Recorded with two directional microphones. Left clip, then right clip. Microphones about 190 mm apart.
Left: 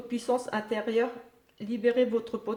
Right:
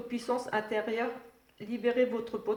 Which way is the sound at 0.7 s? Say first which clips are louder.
Left 4 dB; 45° left (ahead or behind).